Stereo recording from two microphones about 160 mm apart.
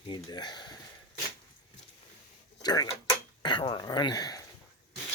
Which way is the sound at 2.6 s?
25° left (ahead or behind).